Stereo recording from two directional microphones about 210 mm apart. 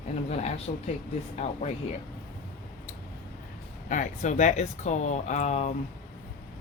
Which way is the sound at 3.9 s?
35° left (ahead or behind).